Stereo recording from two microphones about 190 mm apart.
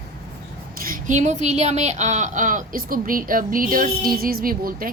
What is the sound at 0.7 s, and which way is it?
A woman's voice, 50° right (ahead or behind).